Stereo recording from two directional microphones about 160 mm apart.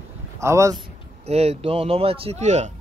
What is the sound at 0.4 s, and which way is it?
Speech, 20° right (ahead or behind).